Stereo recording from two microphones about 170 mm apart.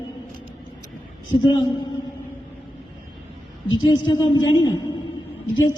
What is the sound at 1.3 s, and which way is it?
Speech, 25° left (ahead or behind).